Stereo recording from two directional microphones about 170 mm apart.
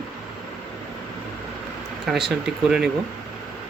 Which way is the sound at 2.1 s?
Centre (ahead or behind).